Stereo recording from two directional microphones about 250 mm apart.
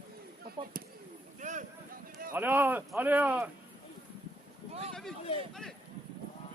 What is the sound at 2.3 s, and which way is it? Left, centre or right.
Speech, centre.